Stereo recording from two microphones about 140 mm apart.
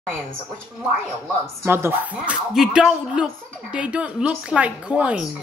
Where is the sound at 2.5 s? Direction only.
5° right (ahead or behind).